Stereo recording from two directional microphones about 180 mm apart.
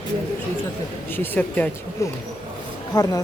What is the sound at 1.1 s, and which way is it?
Speech, 10° left (ahead or behind).